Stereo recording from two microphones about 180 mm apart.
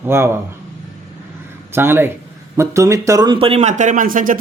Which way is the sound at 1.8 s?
10° right (ahead or behind).